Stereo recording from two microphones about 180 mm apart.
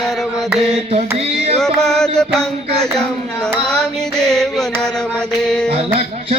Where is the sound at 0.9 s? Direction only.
35° right (ahead or behind).